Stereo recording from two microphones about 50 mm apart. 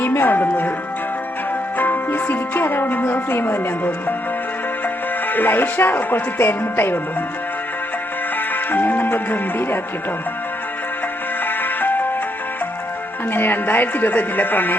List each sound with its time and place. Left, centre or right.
0.0 s speech: left
1.8 s speech: left
5.3 s music: left
8.7 s speech: left
11.4 s music: left
13.3 s speech: left